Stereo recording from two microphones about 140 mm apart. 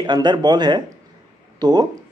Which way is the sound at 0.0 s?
30° right (ahead or behind).